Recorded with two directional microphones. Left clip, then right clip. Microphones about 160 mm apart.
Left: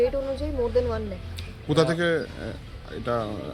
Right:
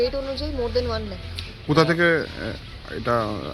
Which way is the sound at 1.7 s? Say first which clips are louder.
Right 4 dB; 25° right (ahead or behind).